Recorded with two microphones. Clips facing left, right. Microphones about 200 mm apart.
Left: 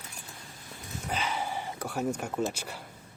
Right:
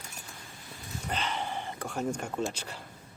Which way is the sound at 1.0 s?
5° left (ahead or behind).